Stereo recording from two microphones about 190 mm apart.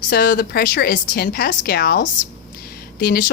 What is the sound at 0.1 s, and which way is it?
A woman's voice, 50° left (ahead or behind).